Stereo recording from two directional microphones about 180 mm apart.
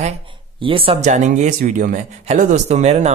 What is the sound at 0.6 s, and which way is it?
Speech, 30° right (ahead or behind).